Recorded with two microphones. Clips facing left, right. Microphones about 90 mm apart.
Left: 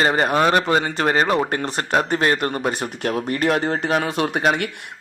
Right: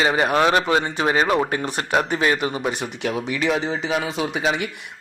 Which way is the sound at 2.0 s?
45° left (ahead or behind).